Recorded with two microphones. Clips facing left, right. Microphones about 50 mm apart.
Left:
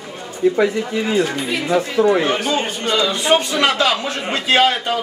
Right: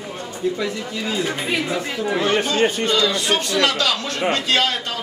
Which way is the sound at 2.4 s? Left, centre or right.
Centre.